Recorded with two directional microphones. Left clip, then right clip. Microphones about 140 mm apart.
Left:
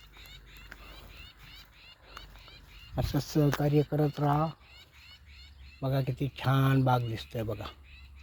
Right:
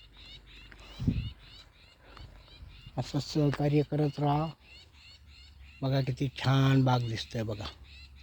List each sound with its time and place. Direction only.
0.2 s a sound: 15° right (ahead or behind)
2.9 s speech: 15° right (ahead or behind)
3.6 s speech: 40° right (ahead or behind)
5.8 s speech: 45° right (ahead or behind)